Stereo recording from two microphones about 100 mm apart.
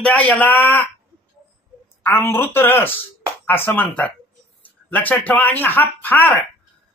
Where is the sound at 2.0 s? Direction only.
25° left (ahead or behind).